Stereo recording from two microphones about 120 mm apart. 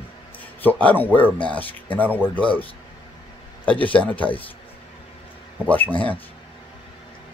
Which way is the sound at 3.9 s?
10° left (ahead or behind).